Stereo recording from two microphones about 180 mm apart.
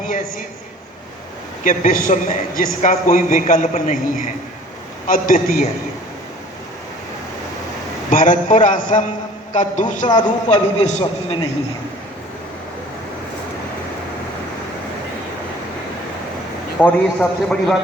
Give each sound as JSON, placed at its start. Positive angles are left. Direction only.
{"t": 1.6, "sound": "a man's voice", "side_deg": 50}
{"t": 5.0, "sound": "a man's voice", "side_deg": 50}
{"t": 8.1, "sound": "a man's voice", "side_deg": 45}
{"t": 16.8, "sound": "a man's voice", "side_deg": 5}